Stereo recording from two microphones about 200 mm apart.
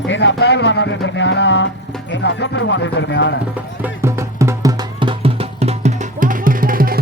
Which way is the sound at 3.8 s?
15° right (ahead or behind).